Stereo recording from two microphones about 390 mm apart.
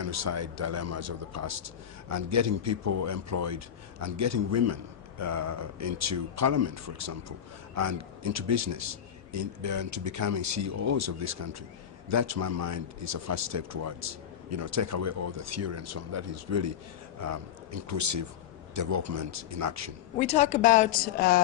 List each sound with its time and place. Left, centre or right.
0.0 s a man's voice: right
20.1 s a woman's voice: centre